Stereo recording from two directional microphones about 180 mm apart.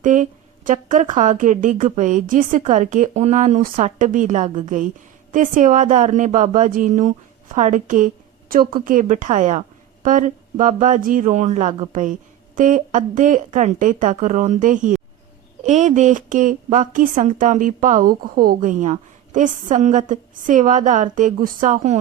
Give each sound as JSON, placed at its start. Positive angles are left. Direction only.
{"t": 0.0, "sound": "a woman's voice", "side_deg": -45}